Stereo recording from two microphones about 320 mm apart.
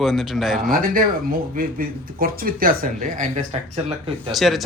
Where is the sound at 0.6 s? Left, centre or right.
Right.